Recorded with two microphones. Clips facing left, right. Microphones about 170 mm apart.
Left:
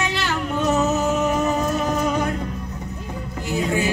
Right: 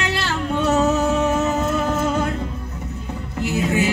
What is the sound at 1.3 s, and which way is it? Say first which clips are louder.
Music: right 1 dB; 25° right (ahead or behind).